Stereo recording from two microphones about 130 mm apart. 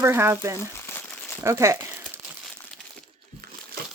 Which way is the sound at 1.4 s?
25° right (ahead or behind).